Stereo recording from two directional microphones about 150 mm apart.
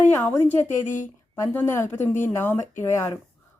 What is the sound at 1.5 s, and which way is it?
Speech, 15° left (ahead or behind).